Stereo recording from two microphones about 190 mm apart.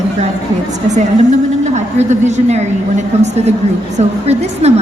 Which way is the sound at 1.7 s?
40° right (ahead or behind).